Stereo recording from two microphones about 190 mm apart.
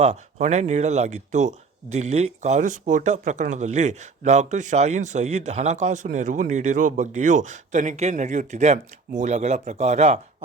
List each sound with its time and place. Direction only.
0.0 s speech: 35° right (ahead or behind)